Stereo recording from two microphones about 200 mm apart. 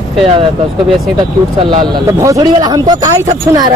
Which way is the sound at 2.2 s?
15° right (ahead or behind).